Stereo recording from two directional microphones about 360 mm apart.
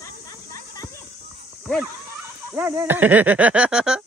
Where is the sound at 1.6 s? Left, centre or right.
Centre.